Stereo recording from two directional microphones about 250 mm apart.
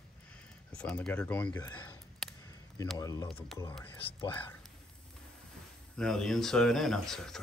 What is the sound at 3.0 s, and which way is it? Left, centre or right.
Speech, centre.